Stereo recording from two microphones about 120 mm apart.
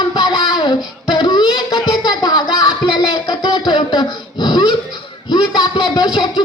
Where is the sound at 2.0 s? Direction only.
35° left (ahead or behind).